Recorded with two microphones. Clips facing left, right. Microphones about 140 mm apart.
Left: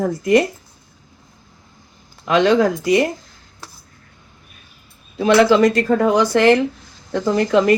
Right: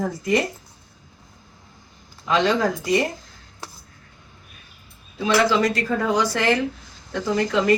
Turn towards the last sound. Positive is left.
turn(degrees=55)  # may be behind; listen again after turning